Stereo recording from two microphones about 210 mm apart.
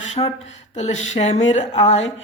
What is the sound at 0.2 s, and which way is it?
Speech, 25° left (ahead or behind).